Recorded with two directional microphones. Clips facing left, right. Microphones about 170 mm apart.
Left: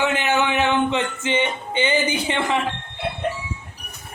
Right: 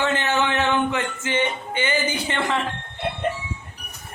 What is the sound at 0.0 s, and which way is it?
Speech, 15° left (ahead or behind).